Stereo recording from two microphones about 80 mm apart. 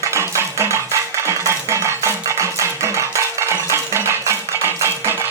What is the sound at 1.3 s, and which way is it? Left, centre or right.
Music, right.